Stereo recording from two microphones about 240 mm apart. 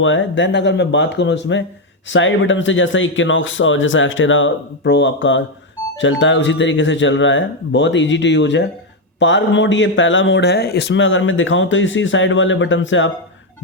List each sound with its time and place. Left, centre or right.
0.0 s a man's voice: left